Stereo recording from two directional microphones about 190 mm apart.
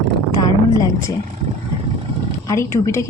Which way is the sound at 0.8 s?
15° left (ahead or behind).